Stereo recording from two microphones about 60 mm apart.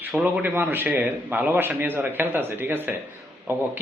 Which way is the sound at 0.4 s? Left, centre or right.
Right.